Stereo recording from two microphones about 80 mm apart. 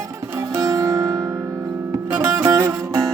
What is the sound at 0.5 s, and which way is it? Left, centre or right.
Music, right.